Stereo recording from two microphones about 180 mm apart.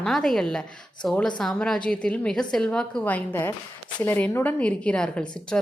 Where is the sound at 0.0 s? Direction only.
Centre (ahead or behind).